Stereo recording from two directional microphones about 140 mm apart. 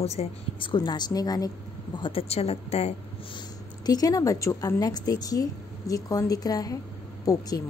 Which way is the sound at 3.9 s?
25° left (ahead or behind).